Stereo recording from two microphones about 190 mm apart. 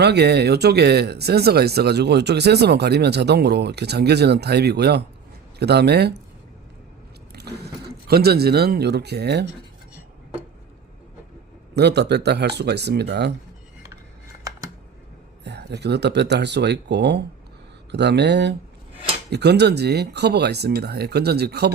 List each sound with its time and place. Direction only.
0.0 s speech: 60° right (ahead or behind)
7.3 s speech: 60° right (ahead or behind)
11.7 s speech: 60° right (ahead or behind)
15.4 s speech: 60° right (ahead or behind)